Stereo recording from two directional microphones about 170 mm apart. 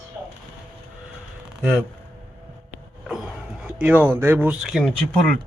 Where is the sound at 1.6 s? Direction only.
5° right (ahead or behind).